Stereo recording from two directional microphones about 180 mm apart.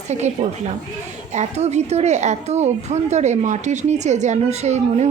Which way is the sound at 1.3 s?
40° right (ahead or behind).